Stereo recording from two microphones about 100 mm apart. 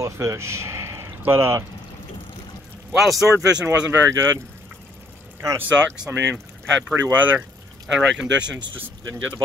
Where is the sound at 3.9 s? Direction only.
30° right (ahead or behind).